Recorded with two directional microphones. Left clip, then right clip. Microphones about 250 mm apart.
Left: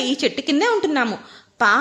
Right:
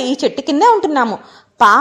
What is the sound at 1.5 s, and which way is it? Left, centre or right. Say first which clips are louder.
Speech: right 7 dB; centre.